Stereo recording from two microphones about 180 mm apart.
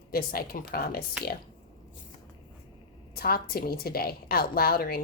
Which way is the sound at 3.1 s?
55° left (ahead or behind).